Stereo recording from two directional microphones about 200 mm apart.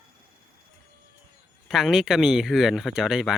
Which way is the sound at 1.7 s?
Centre (ahead or behind).